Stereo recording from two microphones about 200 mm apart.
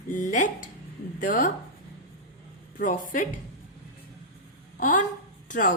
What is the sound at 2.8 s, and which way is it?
Speech, 40° left (ahead or behind).